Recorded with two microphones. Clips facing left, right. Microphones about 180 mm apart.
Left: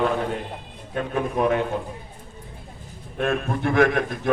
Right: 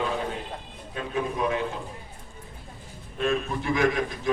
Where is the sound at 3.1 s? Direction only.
60° left (ahead or behind).